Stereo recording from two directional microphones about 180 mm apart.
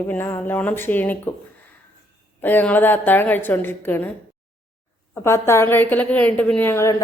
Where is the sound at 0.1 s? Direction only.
10° left (ahead or behind).